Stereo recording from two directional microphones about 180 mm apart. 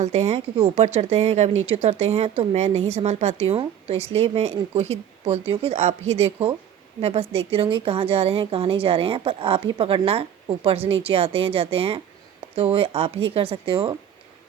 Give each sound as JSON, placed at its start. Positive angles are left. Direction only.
{"t": 0.0, "sound": "speech", "side_deg": -40}